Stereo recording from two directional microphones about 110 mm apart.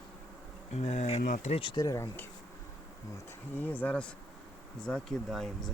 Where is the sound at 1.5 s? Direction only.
50° left (ahead or behind).